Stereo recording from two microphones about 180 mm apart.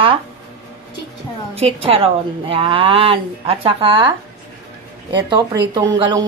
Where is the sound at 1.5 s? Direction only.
30° right (ahead or behind).